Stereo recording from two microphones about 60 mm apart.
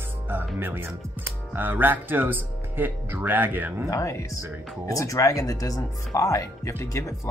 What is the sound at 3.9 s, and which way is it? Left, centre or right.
Speech, left.